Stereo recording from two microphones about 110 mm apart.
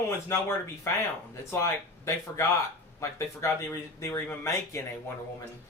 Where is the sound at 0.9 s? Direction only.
25° left (ahead or behind).